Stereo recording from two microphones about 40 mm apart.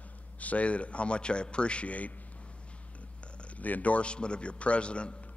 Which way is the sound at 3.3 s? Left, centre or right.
Left.